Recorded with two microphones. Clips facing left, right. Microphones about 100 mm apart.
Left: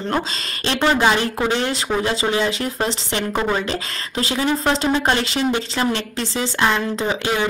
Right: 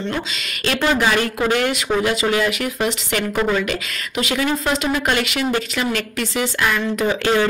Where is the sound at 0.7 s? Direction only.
25° left (ahead or behind).